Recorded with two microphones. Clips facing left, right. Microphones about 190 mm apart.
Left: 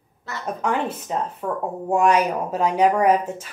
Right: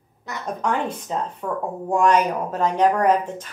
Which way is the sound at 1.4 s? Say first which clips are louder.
Left 1 dB; 5° left (ahead or behind).